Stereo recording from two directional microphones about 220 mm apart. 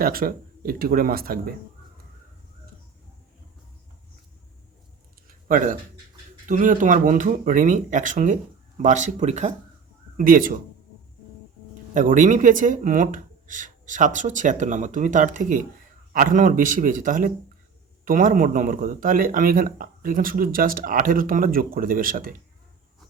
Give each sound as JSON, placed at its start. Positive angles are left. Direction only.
{"t": 0.0, "sound": "a man's voice", "side_deg": -40}
{"t": 5.3, "sound": "a sound", "side_deg": -35}
{"t": 6.4, "sound": "a man's voice", "side_deg": -35}
{"t": 11.9, "sound": "a man's voice", "side_deg": -35}